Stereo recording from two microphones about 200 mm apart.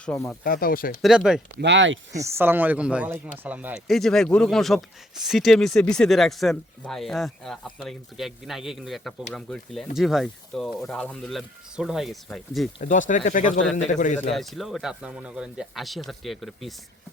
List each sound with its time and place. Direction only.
0.0 s speech: 5° left (ahead or behind)
0.4 s speech: 45° left (ahead or behind)
1.0 s speech: centre (ahead or behind)
1.5 s speech: 65° right (ahead or behind)
2.1 s speech: 15° right (ahead or behind)
12.8 s speech: 40° left (ahead or behind)
14.3 s speech: centre (ahead or behind)